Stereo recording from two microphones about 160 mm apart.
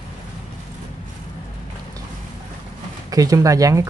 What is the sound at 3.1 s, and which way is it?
Speech, 20° right (ahead or behind).